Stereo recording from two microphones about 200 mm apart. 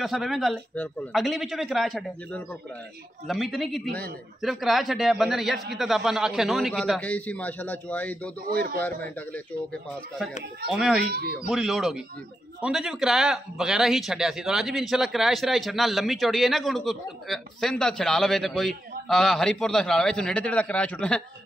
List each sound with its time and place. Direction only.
0.0 s a man's voice: centre (ahead or behind)
8.5 s a man's voice: 45° right (ahead or behind)
8.8 s a man's voice: 10° left (ahead or behind)
11.1 s a man's voice: 50° right (ahead or behind)
11.4 s a man's voice: centre (ahead or behind)